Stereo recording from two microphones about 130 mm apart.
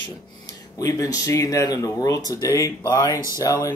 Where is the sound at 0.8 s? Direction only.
25° left (ahead or behind).